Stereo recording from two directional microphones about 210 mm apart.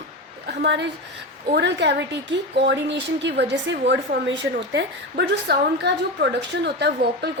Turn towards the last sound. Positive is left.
turn(degrees=-55)  # may be behind; listen again after turning